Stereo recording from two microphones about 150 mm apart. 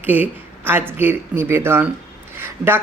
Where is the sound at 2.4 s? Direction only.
15° right (ahead or behind).